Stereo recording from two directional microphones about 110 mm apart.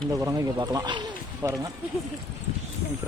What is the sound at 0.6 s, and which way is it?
Speech, 40° right (ahead or behind).